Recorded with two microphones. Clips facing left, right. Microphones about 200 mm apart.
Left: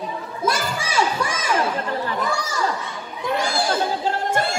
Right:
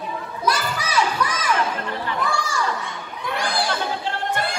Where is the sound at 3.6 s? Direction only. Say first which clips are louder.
Left 3 dB; 40° left (ahead or behind).